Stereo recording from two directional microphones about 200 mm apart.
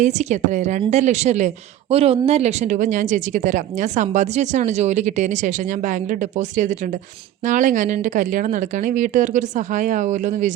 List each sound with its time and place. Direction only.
0.0 s a woman's voice: 35° right (ahead or behind)